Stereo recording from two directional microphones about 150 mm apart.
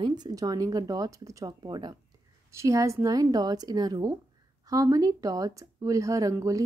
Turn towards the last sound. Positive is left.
turn(degrees=-20)  # may be behind; listen again after turning